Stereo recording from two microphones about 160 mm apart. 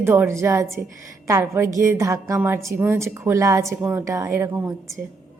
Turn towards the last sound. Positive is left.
turn(degrees=-15)  # may be behind; listen again after turning